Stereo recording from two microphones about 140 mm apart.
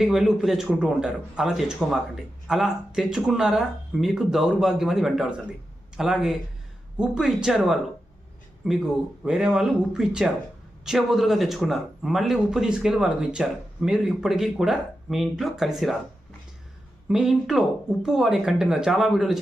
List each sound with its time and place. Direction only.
0.0 s speech: centre (ahead or behind)
17.1 s speech: 5° right (ahead or behind)